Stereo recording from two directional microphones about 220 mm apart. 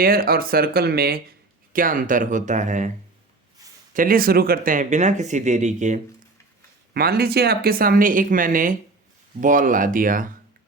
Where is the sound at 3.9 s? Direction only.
40° right (ahead or behind).